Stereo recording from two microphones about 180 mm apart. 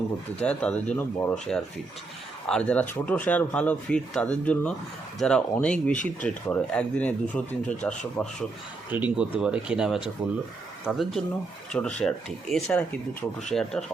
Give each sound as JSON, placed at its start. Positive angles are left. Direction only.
{"t": 0.4, "sound": "speech", "side_deg": 5}
{"t": 8.9, "sound": "speech", "side_deg": -10}